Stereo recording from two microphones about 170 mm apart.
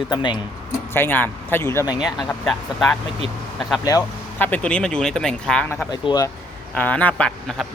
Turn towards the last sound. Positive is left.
turn(degrees=5)  # may be behind; listen again after turning